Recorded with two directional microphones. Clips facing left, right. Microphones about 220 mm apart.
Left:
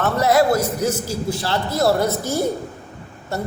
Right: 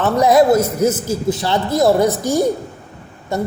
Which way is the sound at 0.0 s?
15° right (ahead or behind).